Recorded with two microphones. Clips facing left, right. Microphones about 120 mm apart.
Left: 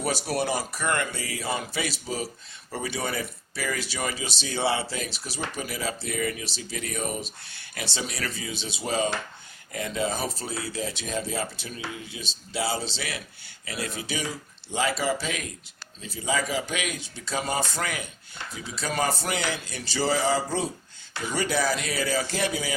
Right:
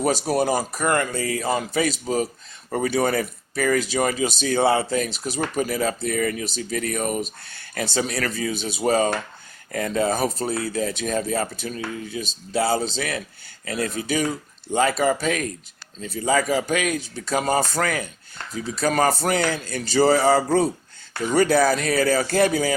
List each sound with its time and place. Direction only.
0.0 s speech: 40° right (ahead or behind)